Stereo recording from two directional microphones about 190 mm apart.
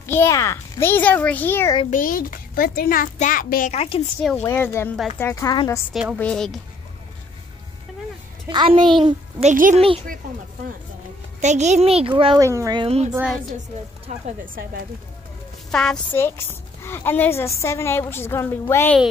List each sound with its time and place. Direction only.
0.0 s a woman's voice: 10° left (ahead or behind)
1.9 s a child's voice: 45° left (ahead or behind)
4.4 s a woman's voice: 15° left (ahead or behind)
4.9 s a woman's voice: centre (ahead or behind)
5.2 s a woman's voice: 15° left (ahead or behind)
6.1 s a woman's voice: 5° left (ahead or behind)
8.5 s a child's voice: 25° right (ahead or behind)
9.0 s a child's voice: 35° right (ahead or behind)
11.4 s a child's voice: 35° right (ahead or behind)
12.4 s speech: 15° right (ahead or behind)
12.8 s a child's voice: 35° right (ahead or behind)
13.1 s a woman's voice: 5° right (ahead or behind)
14.1 s a child's voice: 40° right (ahead or behind)
15.7 s a woman's voice: 5° left (ahead or behind)